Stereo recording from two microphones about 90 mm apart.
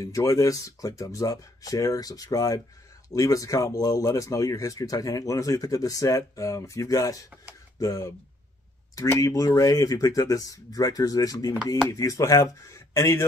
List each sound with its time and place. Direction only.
0.0 s speech: 35° left (ahead or behind)